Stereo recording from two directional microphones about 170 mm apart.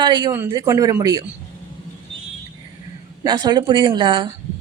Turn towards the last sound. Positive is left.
turn(degrees=-25)  # may be behind; listen again after turning